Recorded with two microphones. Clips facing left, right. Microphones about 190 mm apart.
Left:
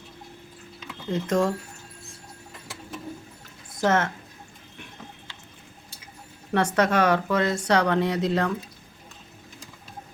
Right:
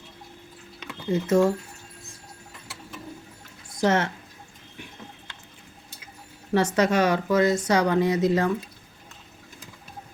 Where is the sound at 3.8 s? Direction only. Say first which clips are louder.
Even; 15° right (ahead or behind).